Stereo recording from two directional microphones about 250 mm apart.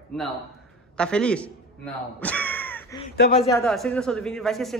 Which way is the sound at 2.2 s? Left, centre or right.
Centre.